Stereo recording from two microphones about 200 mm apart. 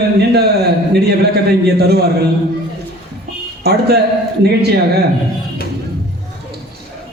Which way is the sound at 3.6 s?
55° right (ahead or behind).